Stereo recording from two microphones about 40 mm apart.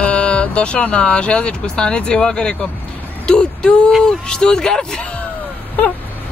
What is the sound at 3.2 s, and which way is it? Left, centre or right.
Speech, left.